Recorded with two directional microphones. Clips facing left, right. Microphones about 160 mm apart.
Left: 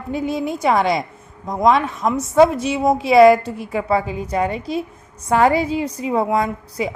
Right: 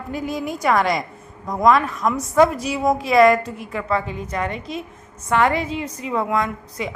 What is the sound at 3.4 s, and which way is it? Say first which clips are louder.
Speech: left 4 dB; 30° left (ahead or behind).